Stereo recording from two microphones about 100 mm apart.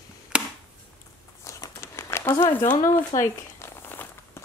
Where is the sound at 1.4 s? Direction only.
30° left (ahead or behind).